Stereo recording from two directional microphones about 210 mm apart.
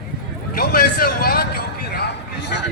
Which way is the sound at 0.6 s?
45° left (ahead or behind).